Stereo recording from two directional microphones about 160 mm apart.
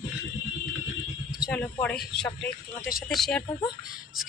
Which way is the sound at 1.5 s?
10° left (ahead or behind).